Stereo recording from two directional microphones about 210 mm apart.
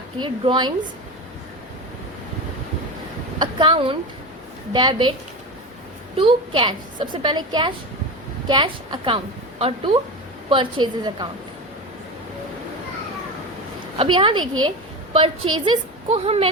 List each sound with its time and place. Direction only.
0.2 s a woman's voice: 20° right (ahead or behind)
3.3 s a woman's voice: 20° right (ahead or behind)
6.1 s a woman's voice: 25° right (ahead or behind)
13.9 s a woman's voice: 25° right (ahead or behind)